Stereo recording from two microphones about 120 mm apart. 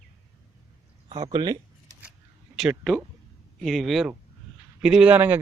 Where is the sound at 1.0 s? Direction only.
40° right (ahead or behind).